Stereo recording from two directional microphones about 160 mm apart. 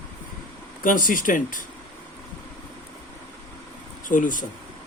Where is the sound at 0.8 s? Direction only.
60° left (ahead or behind).